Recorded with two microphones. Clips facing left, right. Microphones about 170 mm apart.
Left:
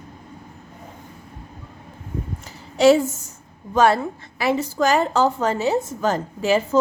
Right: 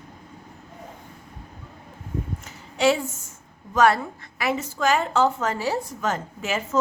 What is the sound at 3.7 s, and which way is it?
A woman's voice, 30° left (ahead or behind).